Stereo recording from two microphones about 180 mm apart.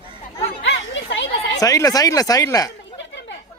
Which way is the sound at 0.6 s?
90° left.